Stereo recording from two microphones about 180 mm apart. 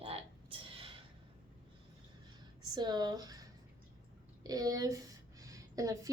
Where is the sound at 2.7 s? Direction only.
25° right (ahead or behind).